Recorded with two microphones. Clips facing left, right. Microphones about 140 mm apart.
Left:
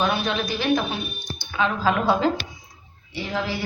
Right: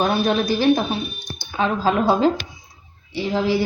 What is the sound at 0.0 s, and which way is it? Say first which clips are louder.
A woman's voice: right 5 dB; 40° right (ahead or behind).